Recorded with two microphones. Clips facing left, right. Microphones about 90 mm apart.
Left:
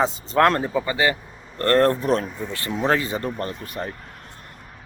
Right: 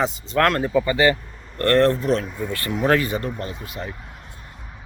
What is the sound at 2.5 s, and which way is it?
Speech, 20° left (ahead or behind).